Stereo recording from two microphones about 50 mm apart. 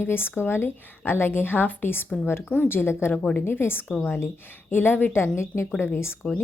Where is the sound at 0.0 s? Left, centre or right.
Left.